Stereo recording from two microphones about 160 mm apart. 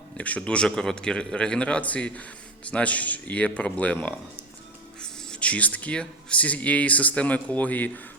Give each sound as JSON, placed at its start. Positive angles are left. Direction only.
{"t": 0.2, "sound": "a man's voice", "side_deg": 10}